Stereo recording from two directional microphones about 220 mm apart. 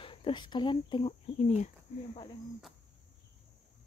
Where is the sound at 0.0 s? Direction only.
25° left (ahead or behind).